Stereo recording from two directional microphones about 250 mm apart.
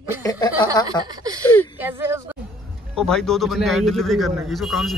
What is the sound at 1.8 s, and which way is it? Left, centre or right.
Speech, centre.